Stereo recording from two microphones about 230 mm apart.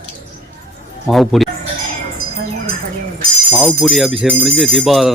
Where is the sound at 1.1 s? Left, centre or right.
Centre.